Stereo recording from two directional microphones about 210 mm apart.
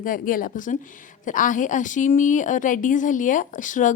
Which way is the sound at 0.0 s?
40° left (ahead or behind).